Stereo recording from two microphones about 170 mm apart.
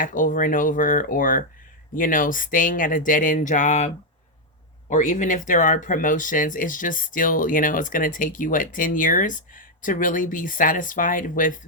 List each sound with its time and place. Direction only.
0.0 s speech: 50° left (ahead or behind)